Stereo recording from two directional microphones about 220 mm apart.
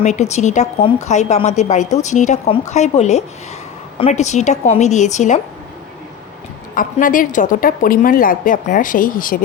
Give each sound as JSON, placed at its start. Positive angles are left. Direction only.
{"t": 0.0, "sound": "a woman's voice", "side_deg": 30}
{"t": 6.7, "sound": "a woman's voice", "side_deg": 40}